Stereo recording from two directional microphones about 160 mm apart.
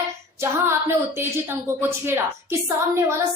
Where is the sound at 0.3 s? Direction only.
15° right (ahead or behind).